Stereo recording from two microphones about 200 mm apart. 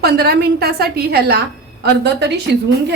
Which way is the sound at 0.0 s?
50° right (ahead or behind).